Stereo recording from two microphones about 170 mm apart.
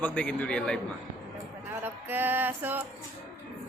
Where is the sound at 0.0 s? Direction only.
5° left (ahead or behind).